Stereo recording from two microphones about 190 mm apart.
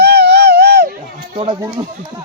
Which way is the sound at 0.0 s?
55° right (ahead or behind).